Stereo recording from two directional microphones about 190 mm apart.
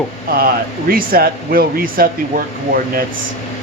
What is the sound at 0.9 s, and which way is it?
Speech, 50° right (ahead or behind).